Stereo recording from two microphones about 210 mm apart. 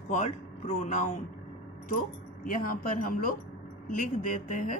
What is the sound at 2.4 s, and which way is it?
A woman's voice, 40° left (ahead or behind).